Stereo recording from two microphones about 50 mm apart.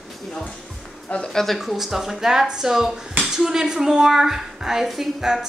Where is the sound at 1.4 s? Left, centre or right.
Centre.